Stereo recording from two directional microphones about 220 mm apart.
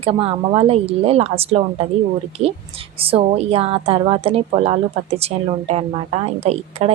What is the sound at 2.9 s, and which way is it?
A woman's voice, 25° right (ahead or behind).